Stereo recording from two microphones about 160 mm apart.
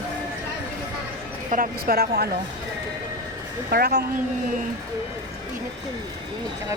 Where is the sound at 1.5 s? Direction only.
65° right (ahead or behind).